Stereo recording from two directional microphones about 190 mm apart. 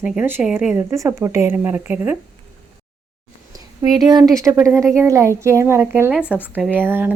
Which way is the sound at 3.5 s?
20° right (ahead or behind).